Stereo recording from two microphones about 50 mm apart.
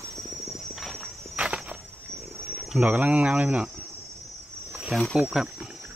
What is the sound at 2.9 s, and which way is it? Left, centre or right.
Speech, right.